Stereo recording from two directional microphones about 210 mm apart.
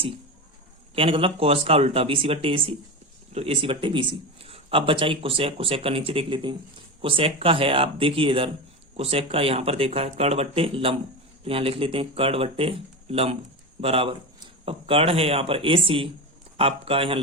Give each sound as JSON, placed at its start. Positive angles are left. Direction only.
{"t": 0.9, "sound": "a man's voice", "side_deg": -25}